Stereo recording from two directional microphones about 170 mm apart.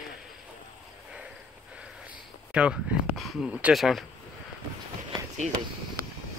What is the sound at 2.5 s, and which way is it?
Speech, 5° right (ahead or behind).